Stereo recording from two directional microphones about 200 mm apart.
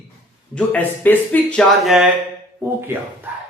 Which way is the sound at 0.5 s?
10° left (ahead or behind).